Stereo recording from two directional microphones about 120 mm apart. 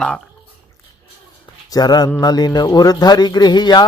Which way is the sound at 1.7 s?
35° left (ahead or behind).